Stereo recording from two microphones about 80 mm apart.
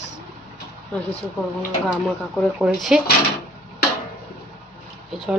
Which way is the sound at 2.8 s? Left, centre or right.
Centre.